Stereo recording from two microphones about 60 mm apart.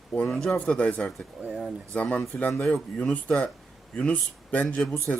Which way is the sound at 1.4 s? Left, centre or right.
Right.